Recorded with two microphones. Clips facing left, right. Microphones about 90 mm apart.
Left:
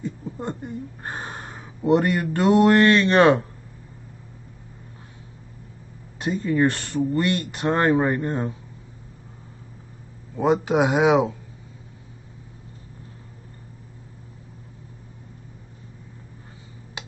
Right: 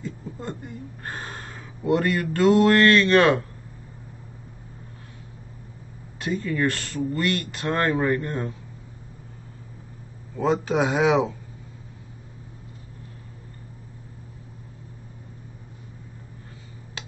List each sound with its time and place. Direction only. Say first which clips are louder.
0.0 s speech: left 3 dB; 20° left (ahead or behind)
6.1 s speech: left 4 dB; 20° left (ahead or behind)
10.3 s speech: left 3 dB; 15° left (ahead or behind)